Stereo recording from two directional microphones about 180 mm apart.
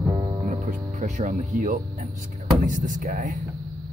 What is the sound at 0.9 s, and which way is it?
Speech, 40° right (ahead or behind).